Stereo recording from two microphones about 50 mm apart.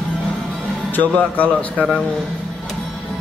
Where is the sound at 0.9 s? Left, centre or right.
Left.